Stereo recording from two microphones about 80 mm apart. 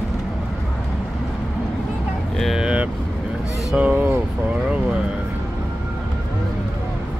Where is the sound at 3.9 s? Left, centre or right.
Right.